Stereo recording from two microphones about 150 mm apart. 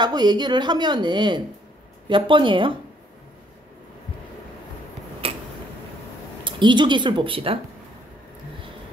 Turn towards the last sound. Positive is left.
turn(degrees=-35)  # may be behind; listen again after turning